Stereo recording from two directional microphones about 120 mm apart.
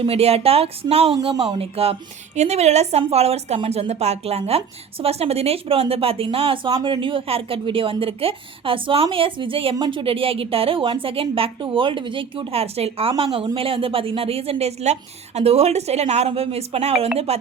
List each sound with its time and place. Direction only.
0.0 s a woman's voice: 55° right (ahead or behind)
1.3 s speech: 35° right (ahead or behind)
1.5 s a woman's voice: 55° right (ahead or behind)